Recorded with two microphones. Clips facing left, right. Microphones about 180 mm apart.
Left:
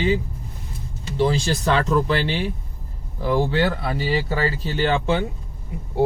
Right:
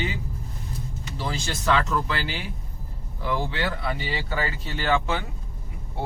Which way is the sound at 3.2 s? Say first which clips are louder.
Left 7 dB; 40° left (ahead or behind).